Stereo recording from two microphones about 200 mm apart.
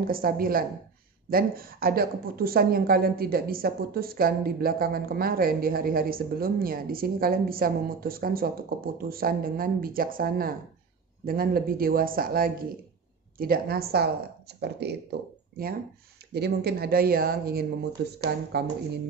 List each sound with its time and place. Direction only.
0.0 s a woman's voice: 45° right (ahead or behind)
16.3 s a woman's voice: 55° right (ahead or behind)